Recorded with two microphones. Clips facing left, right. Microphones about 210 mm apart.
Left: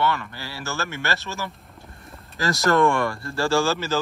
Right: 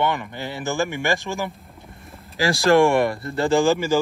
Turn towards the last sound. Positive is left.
turn(degrees=-15)  # may be behind; listen again after turning